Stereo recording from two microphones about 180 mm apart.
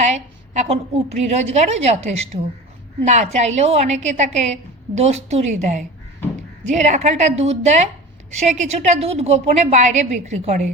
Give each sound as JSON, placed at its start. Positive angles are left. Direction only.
{"t": 0.0, "sound": "a woman's voice", "side_deg": -40}